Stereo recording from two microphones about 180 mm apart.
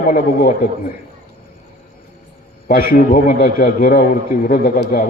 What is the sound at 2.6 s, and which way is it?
A man's voice, 55° left (ahead or behind).